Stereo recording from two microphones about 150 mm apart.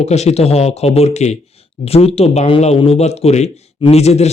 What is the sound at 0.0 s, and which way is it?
Speech, 45° left (ahead or behind).